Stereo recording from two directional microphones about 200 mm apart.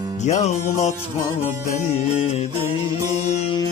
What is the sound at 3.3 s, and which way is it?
Music, 30° left (ahead or behind).